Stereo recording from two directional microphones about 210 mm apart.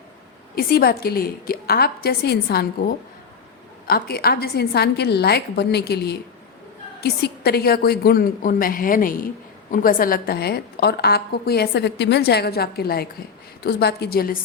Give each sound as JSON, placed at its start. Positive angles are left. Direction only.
{"t": 0.5, "sound": "a woman's voice", "side_deg": 45}